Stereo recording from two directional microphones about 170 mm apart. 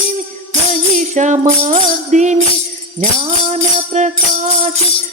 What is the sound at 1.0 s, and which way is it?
Music, 45° right (ahead or behind).